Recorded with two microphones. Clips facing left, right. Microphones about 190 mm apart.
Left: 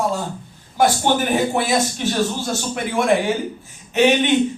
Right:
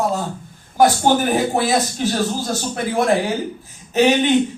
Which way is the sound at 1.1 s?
40° right (ahead or behind).